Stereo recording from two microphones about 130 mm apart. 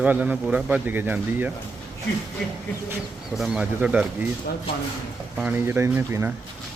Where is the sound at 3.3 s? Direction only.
5° right (ahead or behind).